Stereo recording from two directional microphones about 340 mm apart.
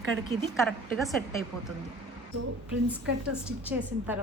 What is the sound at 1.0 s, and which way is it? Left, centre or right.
Speech, centre.